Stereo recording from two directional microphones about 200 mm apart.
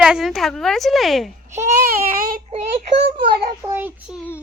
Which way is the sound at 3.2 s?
50° right (ahead or behind).